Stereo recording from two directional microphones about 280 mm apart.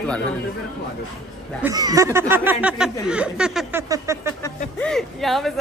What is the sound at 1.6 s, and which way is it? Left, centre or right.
Speech, centre.